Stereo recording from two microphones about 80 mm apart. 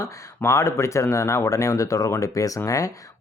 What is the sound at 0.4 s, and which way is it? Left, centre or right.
Speech, left.